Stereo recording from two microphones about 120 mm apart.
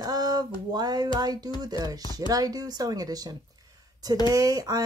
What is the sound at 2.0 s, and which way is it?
Speech, 30° left (ahead or behind).